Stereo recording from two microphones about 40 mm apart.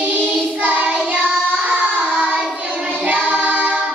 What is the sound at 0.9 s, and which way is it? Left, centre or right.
Child singing, right.